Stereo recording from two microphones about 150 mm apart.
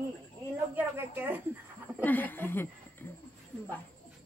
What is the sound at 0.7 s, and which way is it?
Speech, 10° right (ahead or behind).